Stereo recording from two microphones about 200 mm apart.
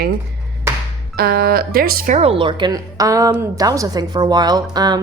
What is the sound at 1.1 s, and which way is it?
Speech, 50° right (ahead or behind).